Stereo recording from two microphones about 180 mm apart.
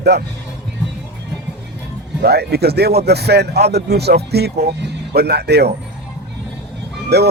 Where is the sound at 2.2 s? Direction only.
65° right (ahead or behind).